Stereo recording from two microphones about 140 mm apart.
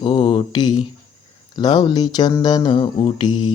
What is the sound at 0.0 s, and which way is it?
Mantra, 40° left (ahead or behind).